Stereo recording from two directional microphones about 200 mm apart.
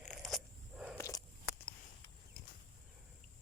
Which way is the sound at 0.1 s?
Centre (ahead or behind).